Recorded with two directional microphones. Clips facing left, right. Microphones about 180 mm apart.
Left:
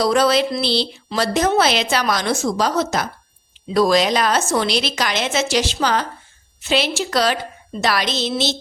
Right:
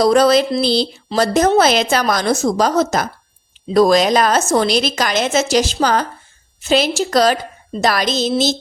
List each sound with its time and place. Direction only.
0.0 s a woman's voice: 40° right (ahead or behind)